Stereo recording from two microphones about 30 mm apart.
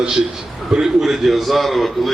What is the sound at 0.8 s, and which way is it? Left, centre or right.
A man's voice, centre.